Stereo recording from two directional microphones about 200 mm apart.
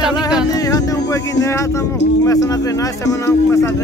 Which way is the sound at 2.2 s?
15° left (ahead or behind).